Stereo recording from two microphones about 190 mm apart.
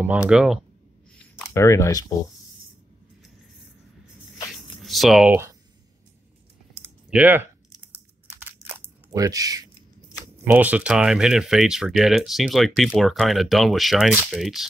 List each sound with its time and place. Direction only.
0.3 s speech: 5° right (ahead or behind)
1.5 s speech: 15° left (ahead or behind)
4.8 s speech: centre (ahead or behind)
7.1 s speech: 10° right (ahead or behind)
9.1 s speech: 20° right (ahead or behind)
10.4 s speech: 10° right (ahead or behind)